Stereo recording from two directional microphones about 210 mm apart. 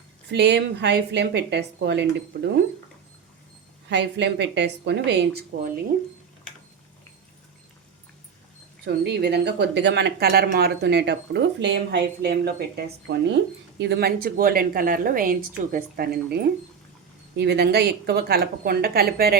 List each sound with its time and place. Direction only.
0.3 s speech: 55° right (ahead or behind)
3.8 s a woman's voice: 55° right (ahead or behind)
8.8 s speech: 55° right (ahead or behind)